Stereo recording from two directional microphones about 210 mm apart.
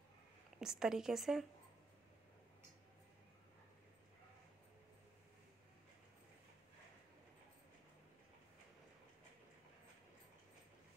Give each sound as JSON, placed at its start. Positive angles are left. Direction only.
{"t": 0.6, "sound": "speech", "side_deg": 0}